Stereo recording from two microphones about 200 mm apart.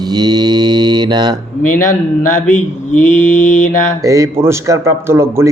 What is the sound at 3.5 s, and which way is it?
Mantra, 40° left (ahead or behind).